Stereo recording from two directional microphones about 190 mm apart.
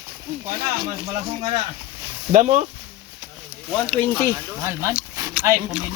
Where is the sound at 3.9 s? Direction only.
10° left (ahead or behind).